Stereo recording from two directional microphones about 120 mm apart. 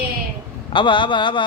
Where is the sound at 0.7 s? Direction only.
45° left (ahead or behind).